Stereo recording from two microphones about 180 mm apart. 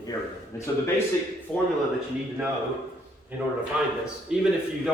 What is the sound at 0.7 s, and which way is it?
Speech, 15° left (ahead or behind).